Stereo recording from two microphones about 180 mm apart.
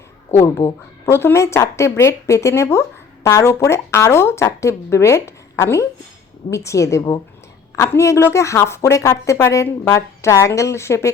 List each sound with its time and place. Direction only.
0.3 s a woman's voice: 15° left (ahead or behind)